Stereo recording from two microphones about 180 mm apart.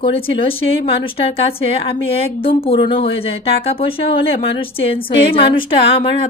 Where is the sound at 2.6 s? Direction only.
30° left (ahead or behind).